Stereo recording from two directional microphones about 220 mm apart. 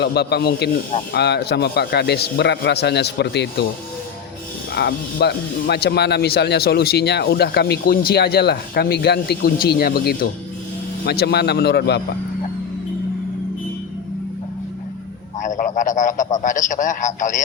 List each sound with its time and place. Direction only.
0.0 s speech: 45° left (ahead or behind)
4.7 s speech: 50° left (ahead or behind)
15.4 s a sound: 35° left (ahead or behind)
16.4 s a man's voice: 35° left (ahead or behind)